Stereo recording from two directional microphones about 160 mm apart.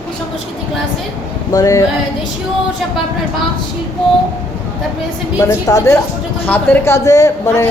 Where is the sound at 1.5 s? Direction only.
20° left (ahead or behind).